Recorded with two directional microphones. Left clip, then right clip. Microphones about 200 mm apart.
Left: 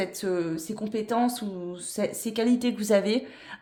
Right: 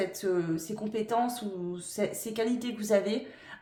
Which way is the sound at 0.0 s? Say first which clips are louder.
Left 2 dB; 35° left (ahead or behind).